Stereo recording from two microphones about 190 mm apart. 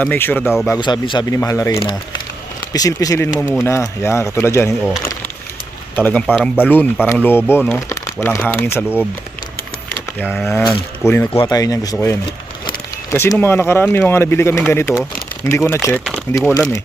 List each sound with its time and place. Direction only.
0.0 s speech: 10° left (ahead or behind)
0.4 s speech: centre (ahead or behind)
0.7 s speech: 25° left (ahead or behind)
6.0 s speech: 10° left (ahead or behind)
6.2 s speech: centre (ahead or behind); by 8.5 s 15° left (ahead or behind)
10.2 s speech: 5° left (ahead or behind)
11.0 s speech: 15° left (ahead or behind)